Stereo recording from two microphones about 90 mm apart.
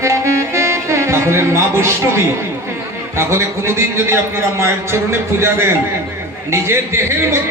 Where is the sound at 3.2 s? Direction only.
30° right (ahead or behind).